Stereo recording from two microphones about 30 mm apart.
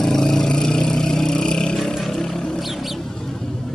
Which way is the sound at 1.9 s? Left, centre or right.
Centre.